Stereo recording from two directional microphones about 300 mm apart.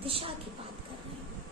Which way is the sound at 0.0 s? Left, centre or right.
Centre.